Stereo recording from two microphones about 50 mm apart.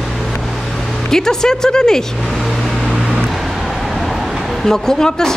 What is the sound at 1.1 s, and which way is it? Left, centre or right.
Speech, centre.